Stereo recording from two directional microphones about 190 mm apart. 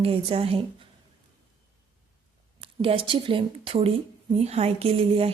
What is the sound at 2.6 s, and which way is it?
Speech, 30° right (ahead or behind).